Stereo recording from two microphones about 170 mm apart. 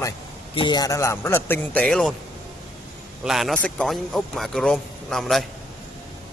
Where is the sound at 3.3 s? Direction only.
Centre (ahead or behind).